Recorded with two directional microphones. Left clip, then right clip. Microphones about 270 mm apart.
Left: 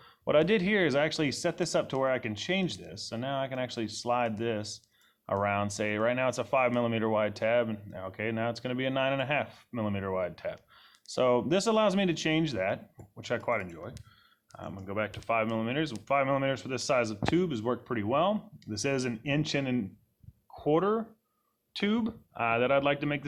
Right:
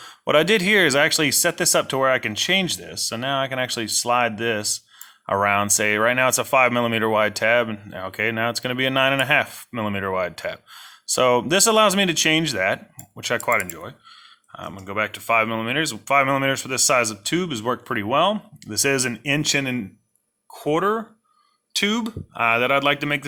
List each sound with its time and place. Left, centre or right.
0.0 s speech: right